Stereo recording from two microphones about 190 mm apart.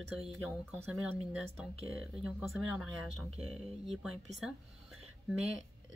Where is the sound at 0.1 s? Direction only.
Centre (ahead or behind).